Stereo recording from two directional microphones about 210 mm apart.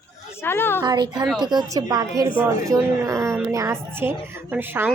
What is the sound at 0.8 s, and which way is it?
A woman's voice, 20° right (ahead or behind).